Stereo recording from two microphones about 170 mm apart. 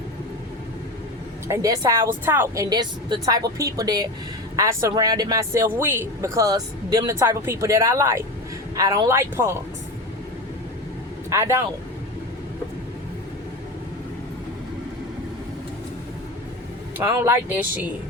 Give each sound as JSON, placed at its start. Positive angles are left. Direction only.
{"t": 1.5, "sound": "a woman's voice", "side_deg": -20}
{"t": 11.3, "sound": "speech", "side_deg": -15}
{"t": 17.0, "sound": "speech", "side_deg": -15}